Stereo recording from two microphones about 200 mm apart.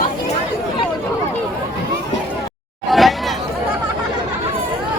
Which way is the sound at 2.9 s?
Centre (ahead or behind).